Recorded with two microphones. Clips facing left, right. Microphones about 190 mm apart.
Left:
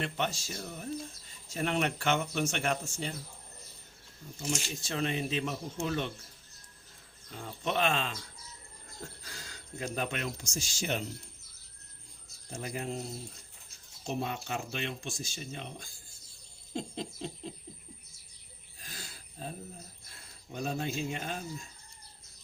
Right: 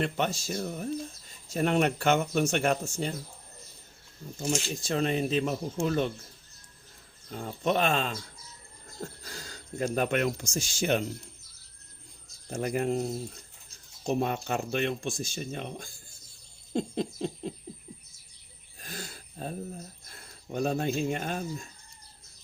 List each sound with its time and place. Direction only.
0.0 s speech: 45° right (ahead or behind)
4.4 s speech: 45° right (ahead or behind)
7.3 s speech: 45° right (ahead or behind)
9.2 s speech: 40° right (ahead or behind); by 11.0 s 60° right (ahead or behind)
12.5 s speech: 55° right (ahead or behind)
14.1 s speech: 50° right (ahead or behind)
18.8 s a sound: 50° right (ahead or behind)
20.5 s speech: 50° right (ahead or behind)